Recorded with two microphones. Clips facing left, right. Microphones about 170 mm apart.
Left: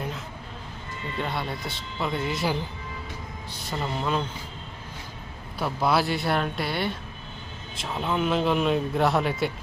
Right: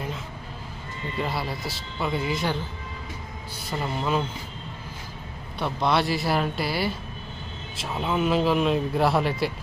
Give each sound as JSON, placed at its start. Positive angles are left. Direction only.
{"t": 1.2, "sound": "speech", "side_deg": -5}
{"t": 3.7, "sound": "speech", "side_deg": 0}
{"t": 5.5, "sound": "speech", "side_deg": 5}